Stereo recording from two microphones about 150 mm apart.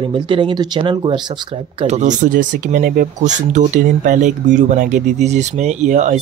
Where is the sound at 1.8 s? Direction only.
50° right (ahead or behind).